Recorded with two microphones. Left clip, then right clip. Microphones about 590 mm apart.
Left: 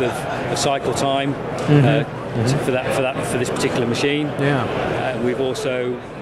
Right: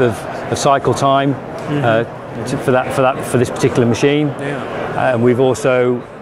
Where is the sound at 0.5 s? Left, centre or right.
Right.